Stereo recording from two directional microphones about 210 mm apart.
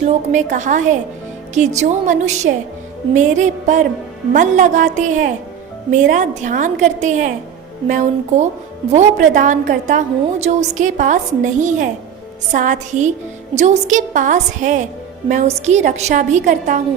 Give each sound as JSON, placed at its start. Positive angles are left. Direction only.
{"t": 0.0, "sound": "a woman's voice", "side_deg": -35}